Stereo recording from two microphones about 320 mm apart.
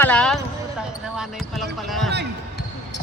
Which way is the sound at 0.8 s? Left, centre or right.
Centre.